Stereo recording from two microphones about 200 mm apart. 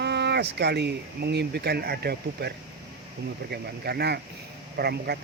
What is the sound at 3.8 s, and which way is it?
Speech, 55° right (ahead or behind).